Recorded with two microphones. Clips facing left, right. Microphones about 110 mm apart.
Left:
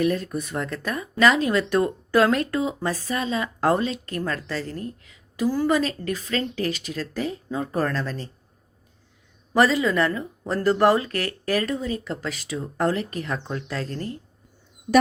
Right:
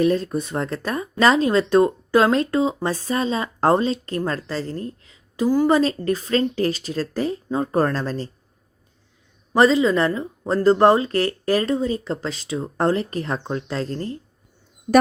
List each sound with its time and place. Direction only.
0.0 s speech: 30° right (ahead or behind)
9.5 s speech: 25° right (ahead or behind)